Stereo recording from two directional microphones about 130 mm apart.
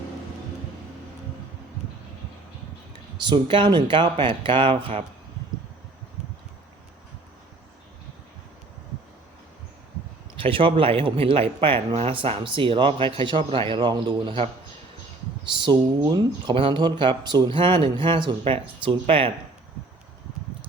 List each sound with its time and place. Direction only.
3.2 s speech: 40° right (ahead or behind)
10.4 s a man's voice: 45° right (ahead or behind)
15.6 s speech: 35° right (ahead or behind)